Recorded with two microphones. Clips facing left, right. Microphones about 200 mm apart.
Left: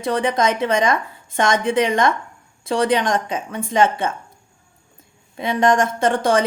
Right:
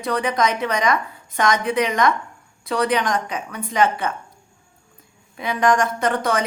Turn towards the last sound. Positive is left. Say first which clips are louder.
# left 4 dB
turn(degrees=30)  # may be behind; listen again after turning